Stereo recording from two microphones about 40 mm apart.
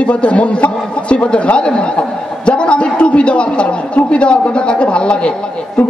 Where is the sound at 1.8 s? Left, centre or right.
Left.